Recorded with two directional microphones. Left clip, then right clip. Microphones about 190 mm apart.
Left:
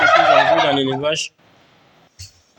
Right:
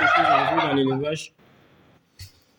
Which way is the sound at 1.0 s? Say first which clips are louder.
Left 8 dB; 15° right (ahead or behind).